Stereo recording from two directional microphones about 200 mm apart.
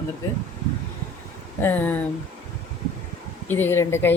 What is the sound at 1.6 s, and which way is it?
Speech, 10° left (ahead or behind).